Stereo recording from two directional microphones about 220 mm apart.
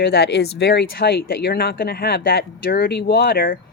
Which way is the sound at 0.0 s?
45° left (ahead or behind).